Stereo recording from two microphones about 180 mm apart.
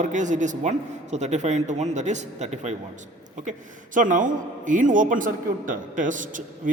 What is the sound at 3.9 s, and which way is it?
A man's voice, 45° right (ahead or behind).